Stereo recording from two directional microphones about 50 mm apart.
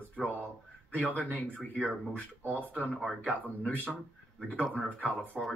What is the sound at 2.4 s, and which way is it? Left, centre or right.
Speech, right.